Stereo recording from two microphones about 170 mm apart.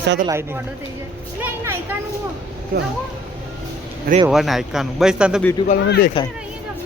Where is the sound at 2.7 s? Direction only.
65° right (ahead or behind).